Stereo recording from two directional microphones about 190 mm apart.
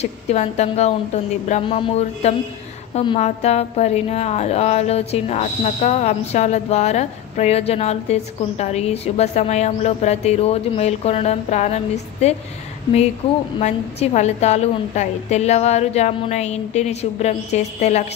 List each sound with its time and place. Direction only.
0.0 s a woman's voice: 35° left (ahead or behind)